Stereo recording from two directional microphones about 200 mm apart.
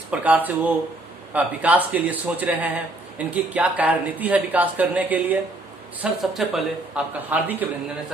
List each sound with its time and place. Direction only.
0.1 s a man's voice: 10° right (ahead or behind)